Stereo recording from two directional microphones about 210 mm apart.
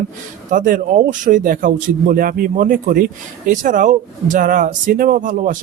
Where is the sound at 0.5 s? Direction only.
40° right (ahead or behind).